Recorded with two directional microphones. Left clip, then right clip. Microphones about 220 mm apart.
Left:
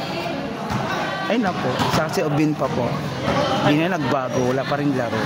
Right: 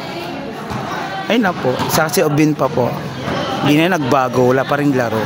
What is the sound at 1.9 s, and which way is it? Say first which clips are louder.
Speech: right 6 dB; 35° right (ahead or behind).